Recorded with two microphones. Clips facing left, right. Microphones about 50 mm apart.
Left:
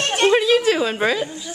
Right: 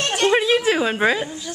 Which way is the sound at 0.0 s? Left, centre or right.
Left.